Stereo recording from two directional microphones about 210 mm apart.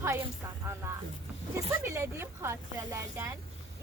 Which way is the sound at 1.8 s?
10° right (ahead or behind).